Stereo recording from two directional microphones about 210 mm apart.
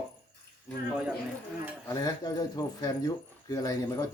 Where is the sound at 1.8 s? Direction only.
20° left (ahead or behind).